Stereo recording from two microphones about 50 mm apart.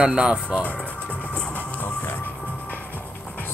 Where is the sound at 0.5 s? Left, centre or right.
Left.